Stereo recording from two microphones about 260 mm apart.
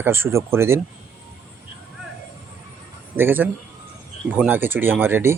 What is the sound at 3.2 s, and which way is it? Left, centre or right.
Speech, centre.